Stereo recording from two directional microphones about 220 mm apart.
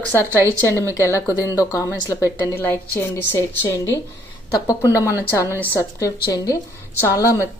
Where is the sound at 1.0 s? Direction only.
15° left (ahead or behind).